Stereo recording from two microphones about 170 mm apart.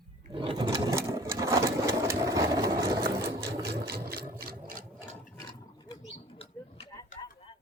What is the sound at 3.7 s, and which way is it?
Sewing machine, 70° right (ahead or behind).